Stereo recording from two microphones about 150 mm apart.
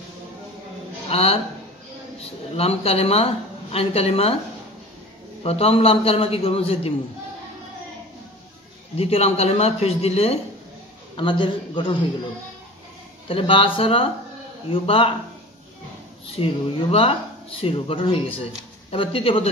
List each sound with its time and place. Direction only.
1.0 s a woman's voice: 40° left (ahead or behind)
5.4 s a woman's voice: 40° left (ahead or behind)
8.9 s a woman's voice: 45° left (ahead or behind)
13.3 s a woman's voice: 35° left (ahead or behind)
16.3 s a woman's voice: 40° left (ahead or behind)